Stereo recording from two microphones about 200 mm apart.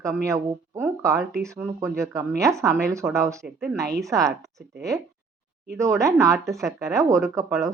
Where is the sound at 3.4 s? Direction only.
5° right (ahead or behind).